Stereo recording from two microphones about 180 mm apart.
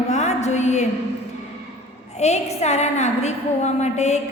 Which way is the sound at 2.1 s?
40° left (ahead or behind).